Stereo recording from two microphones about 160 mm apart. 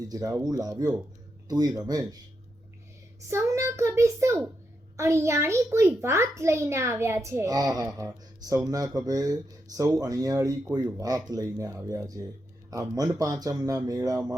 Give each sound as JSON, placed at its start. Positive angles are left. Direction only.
{"t": 0.1, "sound": "a child's voice", "side_deg": -25}
{"t": 3.2, "sound": "a child's voice", "side_deg": -20}